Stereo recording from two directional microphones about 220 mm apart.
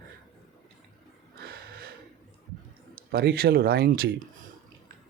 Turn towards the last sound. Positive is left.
turn(degrees=-45)  # may be behind; listen again after turning